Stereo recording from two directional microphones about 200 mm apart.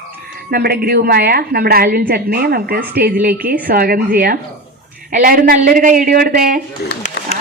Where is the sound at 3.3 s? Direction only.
10° right (ahead or behind).